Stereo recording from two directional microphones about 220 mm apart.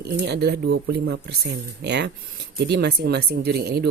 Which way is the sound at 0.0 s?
50° right (ahead or behind).